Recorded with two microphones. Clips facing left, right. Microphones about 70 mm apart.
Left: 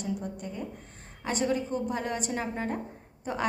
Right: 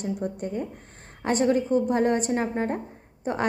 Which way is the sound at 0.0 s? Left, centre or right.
Right.